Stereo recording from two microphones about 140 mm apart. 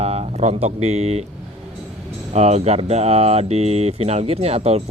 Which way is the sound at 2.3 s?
50° right (ahead or behind).